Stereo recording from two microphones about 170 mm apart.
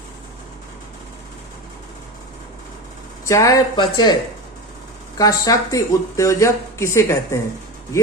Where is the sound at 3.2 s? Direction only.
20° left (ahead or behind).